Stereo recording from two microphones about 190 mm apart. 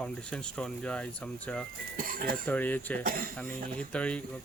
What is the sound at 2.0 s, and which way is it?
Speech, 45° right (ahead or behind).